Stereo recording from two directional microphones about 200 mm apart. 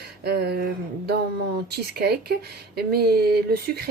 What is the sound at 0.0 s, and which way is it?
Speech, 55° right (ahead or behind).